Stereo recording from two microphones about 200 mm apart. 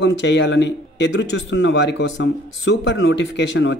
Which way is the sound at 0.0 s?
65° left (ahead or behind).